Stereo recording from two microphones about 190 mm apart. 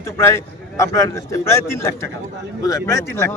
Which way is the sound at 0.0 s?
15° left (ahead or behind).